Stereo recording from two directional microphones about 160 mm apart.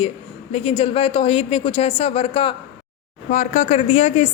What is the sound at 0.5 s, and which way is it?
A woman's voice, 40° left (ahead or behind).